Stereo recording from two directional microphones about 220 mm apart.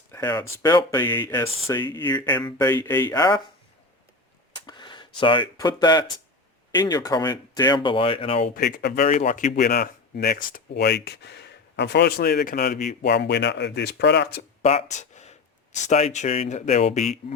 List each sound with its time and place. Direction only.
0.1 s speech: 15° left (ahead or behind)
4.5 s speech: 20° left (ahead or behind)
8.5 s speech: 45° left (ahead or behind)
9.0 s speech: 35° left (ahead or behind)
13.0 s speech: 50° left (ahead or behind)
14.6 s a sound: 25° left (ahead or behind)
15.9 s speech: 30° left (ahead or behind)